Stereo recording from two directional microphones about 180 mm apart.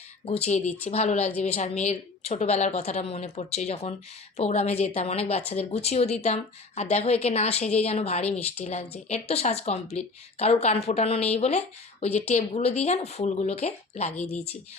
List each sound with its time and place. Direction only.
0.3 s a woman's voice: 35° left (ahead or behind)
14.2 s a woman's voice: 10° left (ahead or behind)